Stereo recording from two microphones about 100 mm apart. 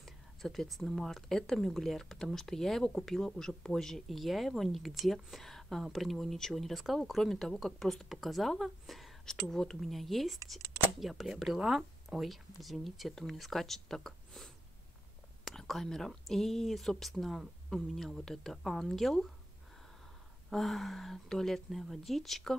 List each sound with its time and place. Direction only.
0.0 s speech: centre (ahead or behind)
20.4 s speech: centre (ahead or behind)